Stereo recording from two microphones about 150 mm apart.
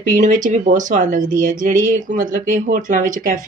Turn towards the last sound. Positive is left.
turn(degrees=-65)  # may be behind; listen again after turning